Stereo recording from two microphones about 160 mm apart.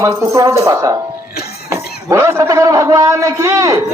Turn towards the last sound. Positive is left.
turn(degrees=-20)  # may be behind; listen again after turning